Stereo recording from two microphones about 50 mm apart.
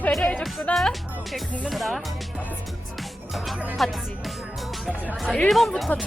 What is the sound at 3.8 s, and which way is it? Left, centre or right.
Speech, centre.